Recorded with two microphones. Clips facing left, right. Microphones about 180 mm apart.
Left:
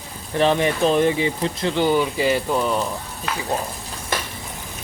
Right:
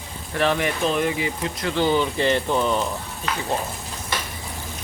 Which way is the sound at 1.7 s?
15° left (ahead or behind).